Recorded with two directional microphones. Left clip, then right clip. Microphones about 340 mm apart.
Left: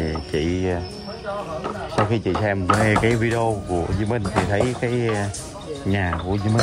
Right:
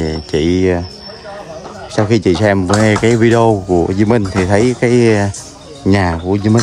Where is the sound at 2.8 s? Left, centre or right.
Centre.